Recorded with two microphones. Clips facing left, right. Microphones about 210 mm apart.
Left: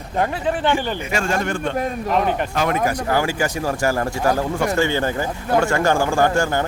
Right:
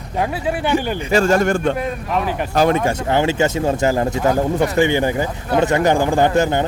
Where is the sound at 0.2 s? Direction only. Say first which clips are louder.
Even; 10° right (ahead or behind).